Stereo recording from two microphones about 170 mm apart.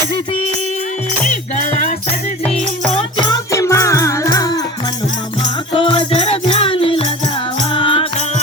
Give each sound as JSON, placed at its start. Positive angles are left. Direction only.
{"t": 2.9, "sound": "music", "side_deg": 25}
{"t": 5.7, "sound": "music", "side_deg": 30}